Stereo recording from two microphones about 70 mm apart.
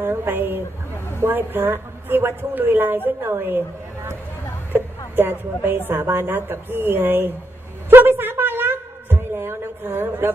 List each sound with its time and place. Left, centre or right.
0.0 s a woman's voice: right
7.9 s a sound: right
9.3 s a woman's voice: right